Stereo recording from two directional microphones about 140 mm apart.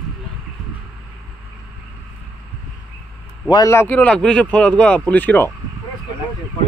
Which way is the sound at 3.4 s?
30° left (ahead or behind).